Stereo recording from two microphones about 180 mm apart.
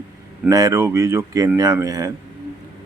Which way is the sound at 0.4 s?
20° right (ahead or behind).